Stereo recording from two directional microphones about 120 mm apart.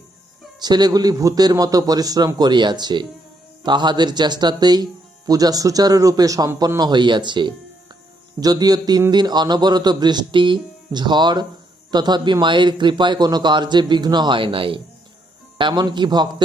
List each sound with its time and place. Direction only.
0.6 s a man's voice: 35° right (ahead or behind)